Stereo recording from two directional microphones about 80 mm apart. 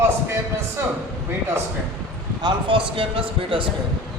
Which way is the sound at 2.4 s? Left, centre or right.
Right.